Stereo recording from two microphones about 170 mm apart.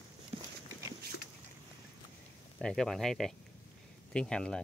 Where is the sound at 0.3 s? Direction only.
35° right (ahead or behind).